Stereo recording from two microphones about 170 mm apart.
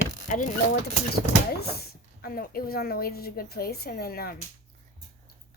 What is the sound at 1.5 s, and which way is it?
A woman's voice, 65° left (ahead or behind).